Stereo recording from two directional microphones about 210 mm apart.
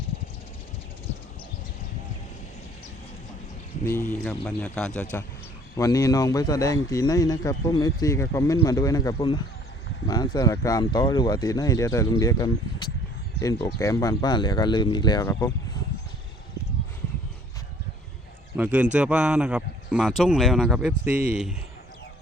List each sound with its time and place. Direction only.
3.8 s a man's voice: 10° left (ahead or behind)
18.5 s a man's voice: 5° right (ahead or behind)